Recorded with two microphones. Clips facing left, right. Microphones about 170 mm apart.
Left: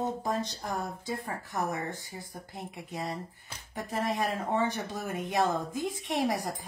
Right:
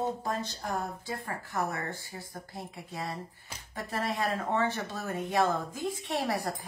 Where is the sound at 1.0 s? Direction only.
15° left (ahead or behind).